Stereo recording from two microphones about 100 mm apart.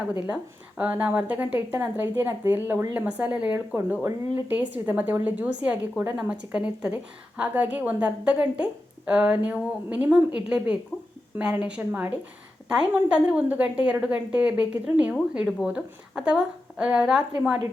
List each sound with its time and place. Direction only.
0.1 s a woman's voice: 15° right (ahead or behind)
3.8 s a woman's voice: 20° right (ahead or behind)